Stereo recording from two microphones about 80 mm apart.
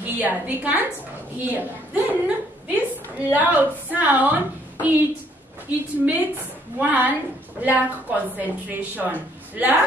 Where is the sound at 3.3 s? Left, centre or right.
Centre.